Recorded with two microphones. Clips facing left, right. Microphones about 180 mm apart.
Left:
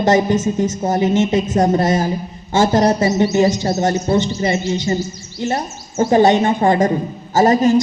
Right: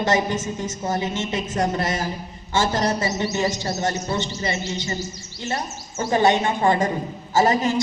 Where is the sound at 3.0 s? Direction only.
45° left (ahead or behind).